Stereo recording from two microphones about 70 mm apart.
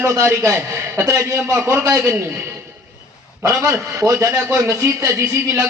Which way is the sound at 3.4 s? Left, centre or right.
Right.